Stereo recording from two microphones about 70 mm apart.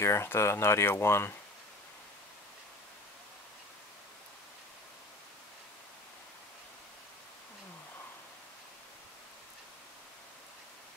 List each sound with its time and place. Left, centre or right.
0.0 s speech: left